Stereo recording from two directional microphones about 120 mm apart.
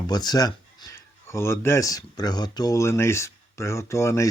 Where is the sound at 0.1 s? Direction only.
35° left (ahead or behind).